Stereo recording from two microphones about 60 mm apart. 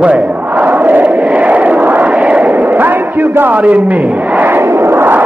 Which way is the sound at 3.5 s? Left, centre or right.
Right.